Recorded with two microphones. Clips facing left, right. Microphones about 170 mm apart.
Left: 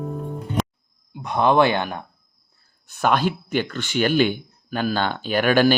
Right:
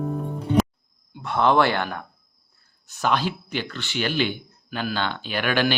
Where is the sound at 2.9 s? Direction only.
55° left (ahead or behind).